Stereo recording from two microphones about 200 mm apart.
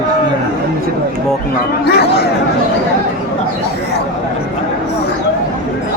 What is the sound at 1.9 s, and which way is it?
Speech, 55° left (ahead or behind).